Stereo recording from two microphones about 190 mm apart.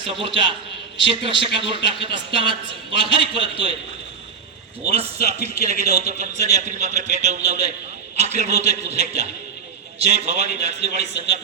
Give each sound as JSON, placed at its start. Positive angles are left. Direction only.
{"t": 0.0, "sound": "a man's voice", "side_deg": -25}
{"t": 4.9, "sound": "a man's voice", "side_deg": -30}